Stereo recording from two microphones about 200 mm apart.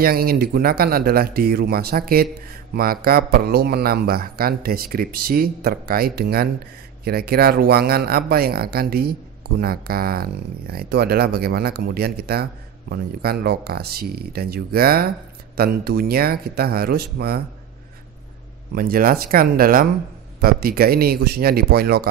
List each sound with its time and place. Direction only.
0.0 s speech: 50° right (ahead or behind)
18.8 s speech: 45° right (ahead or behind)